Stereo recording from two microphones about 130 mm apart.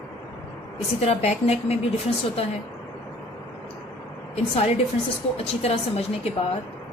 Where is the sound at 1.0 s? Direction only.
55° left (ahead or behind).